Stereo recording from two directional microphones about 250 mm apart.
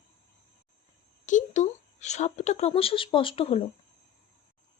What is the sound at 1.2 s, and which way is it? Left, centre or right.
Speech, left.